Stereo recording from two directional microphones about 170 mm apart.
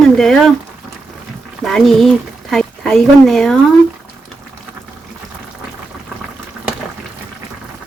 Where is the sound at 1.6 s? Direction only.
Centre (ahead or behind).